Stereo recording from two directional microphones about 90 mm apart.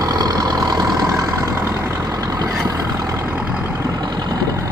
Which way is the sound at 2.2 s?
45° right (ahead or behind).